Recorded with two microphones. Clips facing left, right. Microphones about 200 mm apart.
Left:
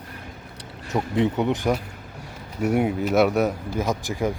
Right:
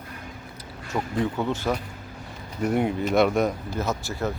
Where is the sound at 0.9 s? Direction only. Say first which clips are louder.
Left 4 dB; 20° left (ahead or behind).